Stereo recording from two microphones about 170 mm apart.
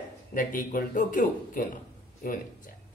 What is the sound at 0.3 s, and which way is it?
A man's voice, 55° left (ahead or behind).